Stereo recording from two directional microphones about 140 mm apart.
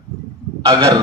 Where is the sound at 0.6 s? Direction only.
30° right (ahead or behind).